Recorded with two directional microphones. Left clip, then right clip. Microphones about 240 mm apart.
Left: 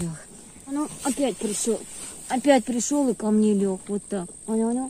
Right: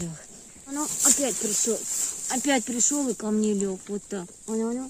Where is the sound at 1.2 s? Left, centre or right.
Centre.